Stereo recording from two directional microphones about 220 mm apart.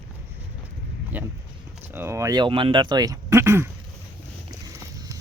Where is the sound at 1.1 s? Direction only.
5° right (ahead or behind).